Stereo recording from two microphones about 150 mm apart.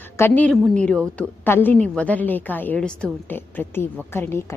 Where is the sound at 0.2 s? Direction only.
15° left (ahead or behind).